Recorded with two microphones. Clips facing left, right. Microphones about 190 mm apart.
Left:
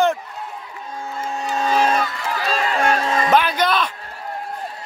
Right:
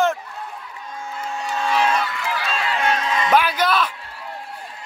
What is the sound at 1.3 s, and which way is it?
Run, 35° left (ahead or behind).